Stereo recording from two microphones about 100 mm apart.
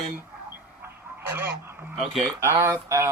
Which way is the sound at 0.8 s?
20° right (ahead or behind).